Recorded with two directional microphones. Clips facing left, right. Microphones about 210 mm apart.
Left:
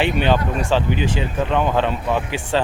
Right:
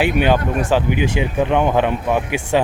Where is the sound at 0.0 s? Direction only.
10° right (ahead or behind).